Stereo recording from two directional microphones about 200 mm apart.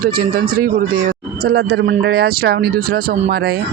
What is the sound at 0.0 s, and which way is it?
Speech, 50° right (ahead or behind).